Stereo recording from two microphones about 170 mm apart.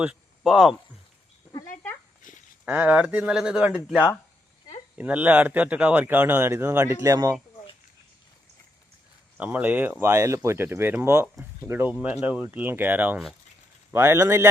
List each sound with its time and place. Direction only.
0.0 s speech: 5° right (ahead or behind)
1.7 s dog: 10° left (ahead or behind)
2.2 s a sound: 50° left (ahead or behind)
2.6 s speech: 10° right (ahead or behind)
4.9 s speech: 10° right (ahead or behind)
9.4 s speech: 10° right (ahead or behind)